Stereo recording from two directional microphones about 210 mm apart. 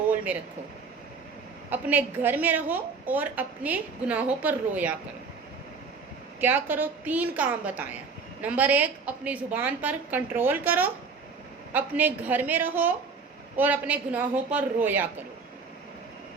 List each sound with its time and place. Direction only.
1.7 s a woman's voice: 10° right (ahead or behind)
6.4 s a woman's voice: 10° right (ahead or behind)